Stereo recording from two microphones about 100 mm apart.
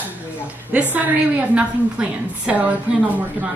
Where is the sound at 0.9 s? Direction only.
15° right (ahead or behind).